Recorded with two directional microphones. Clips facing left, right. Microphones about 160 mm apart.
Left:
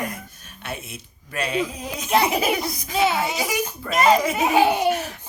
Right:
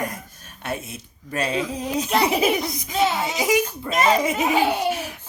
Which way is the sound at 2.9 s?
10° left (ahead or behind).